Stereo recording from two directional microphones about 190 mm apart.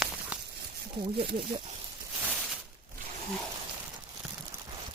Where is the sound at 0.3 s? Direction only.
5° right (ahead or behind).